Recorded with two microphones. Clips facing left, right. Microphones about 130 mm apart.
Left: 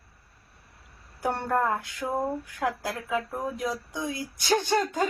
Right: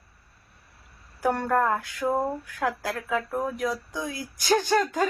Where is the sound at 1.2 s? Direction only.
25° left (ahead or behind).